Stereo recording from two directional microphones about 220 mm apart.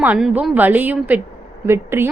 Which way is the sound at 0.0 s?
5° right (ahead or behind).